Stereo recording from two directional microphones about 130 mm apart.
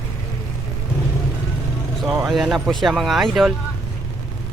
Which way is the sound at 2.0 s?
Centre (ahead or behind).